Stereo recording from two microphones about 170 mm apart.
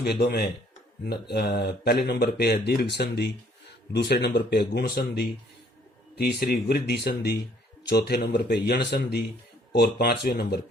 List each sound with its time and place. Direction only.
0.0 s speech: 70° left (ahead or behind)